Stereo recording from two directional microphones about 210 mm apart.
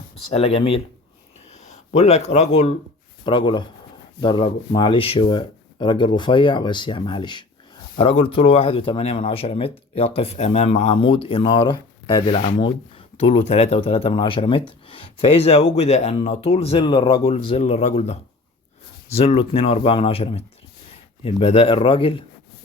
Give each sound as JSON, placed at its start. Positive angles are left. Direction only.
{"t": 0.3, "sound": "speech", "side_deg": 30}